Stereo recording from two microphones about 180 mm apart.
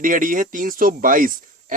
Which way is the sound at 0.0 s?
50° right (ahead or behind).